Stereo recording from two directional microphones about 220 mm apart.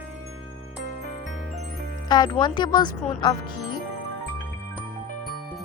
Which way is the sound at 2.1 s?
20° left (ahead or behind).